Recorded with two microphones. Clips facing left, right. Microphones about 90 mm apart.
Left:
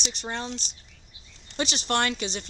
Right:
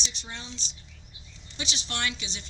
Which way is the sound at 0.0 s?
55° left (ahead or behind).